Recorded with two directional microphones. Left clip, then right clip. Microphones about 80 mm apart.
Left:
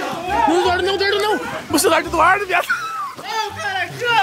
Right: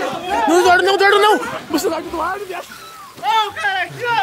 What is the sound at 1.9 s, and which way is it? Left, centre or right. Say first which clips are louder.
Speech: left 7 dB; right.